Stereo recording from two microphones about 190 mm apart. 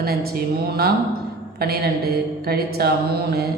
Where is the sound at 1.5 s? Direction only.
55° right (ahead or behind).